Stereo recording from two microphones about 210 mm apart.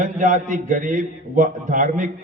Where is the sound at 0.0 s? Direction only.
35° right (ahead or behind).